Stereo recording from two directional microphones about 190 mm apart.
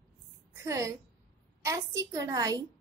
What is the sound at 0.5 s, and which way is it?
A woman's voice, 15° right (ahead or behind).